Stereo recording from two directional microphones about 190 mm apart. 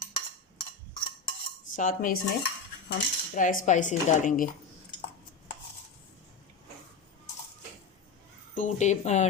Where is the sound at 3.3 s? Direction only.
45° left (ahead or behind).